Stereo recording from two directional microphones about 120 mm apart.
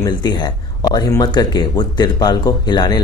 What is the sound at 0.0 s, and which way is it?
Speech, 35° left (ahead or behind).